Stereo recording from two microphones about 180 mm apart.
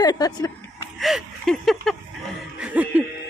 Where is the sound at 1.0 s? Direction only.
Centre (ahead or behind).